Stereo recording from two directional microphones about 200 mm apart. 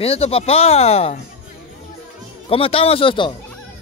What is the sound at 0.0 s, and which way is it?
Speech, 30° left (ahead or behind).